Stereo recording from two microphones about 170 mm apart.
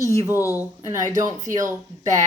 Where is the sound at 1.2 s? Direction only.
50° right (ahead or behind).